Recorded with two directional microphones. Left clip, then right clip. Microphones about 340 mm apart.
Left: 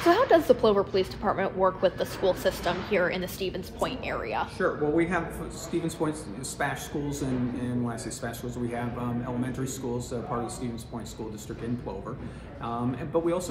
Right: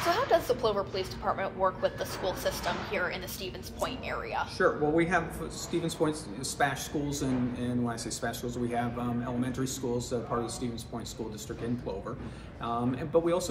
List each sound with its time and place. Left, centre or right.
0.1 s a woman's voice: left
4.6 s speech: centre
12.6 s speech: centre